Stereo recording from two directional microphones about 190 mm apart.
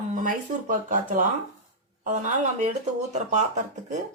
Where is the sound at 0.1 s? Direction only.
45° right (ahead or behind).